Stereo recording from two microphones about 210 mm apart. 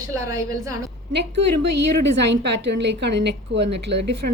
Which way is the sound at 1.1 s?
55° right (ahead or behind).